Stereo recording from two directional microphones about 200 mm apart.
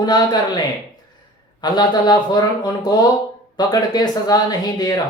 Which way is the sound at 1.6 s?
20° left (ahead or behind).